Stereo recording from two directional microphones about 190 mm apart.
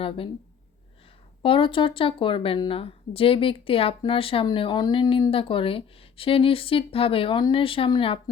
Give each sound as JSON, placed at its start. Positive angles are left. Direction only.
{"t": 1.4, "sound": "speech", "side_deg": 25}